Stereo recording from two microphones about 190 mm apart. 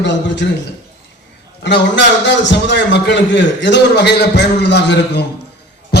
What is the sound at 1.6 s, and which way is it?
A man's voice, 65° left (ahead or behind).